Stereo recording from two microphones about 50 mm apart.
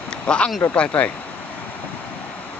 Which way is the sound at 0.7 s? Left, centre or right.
Left.